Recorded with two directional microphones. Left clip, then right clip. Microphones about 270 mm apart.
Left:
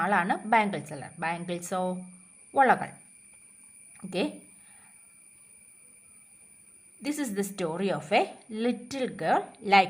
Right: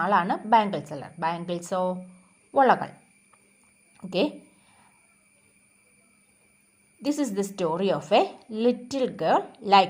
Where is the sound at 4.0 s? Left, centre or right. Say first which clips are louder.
Right 5 dB; centre.